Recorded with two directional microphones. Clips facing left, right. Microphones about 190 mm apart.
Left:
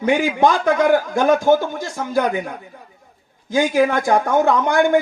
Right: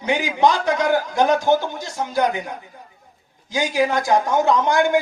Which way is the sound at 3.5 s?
55° left (ahead or behind).